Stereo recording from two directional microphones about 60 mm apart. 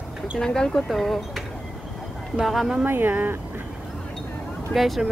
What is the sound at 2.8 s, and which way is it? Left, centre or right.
Speech, right.